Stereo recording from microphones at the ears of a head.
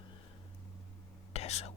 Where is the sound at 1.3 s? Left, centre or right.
Left.